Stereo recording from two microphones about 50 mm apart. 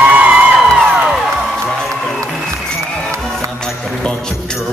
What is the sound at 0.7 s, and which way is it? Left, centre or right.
Music, right.